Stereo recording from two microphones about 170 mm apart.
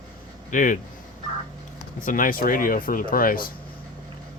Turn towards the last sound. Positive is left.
turn(degrees=55)  # may be behind; listen again after turning